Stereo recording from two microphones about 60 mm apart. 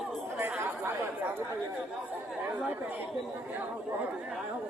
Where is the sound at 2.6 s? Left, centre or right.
Right.